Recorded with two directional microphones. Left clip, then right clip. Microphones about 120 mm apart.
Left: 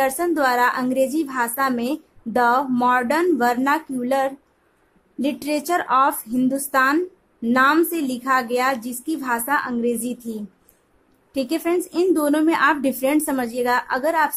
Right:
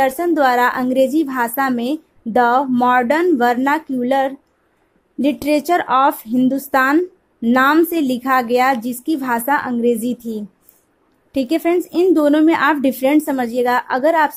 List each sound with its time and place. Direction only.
0.0 s a woman's voice: 35° right (ahead or behind)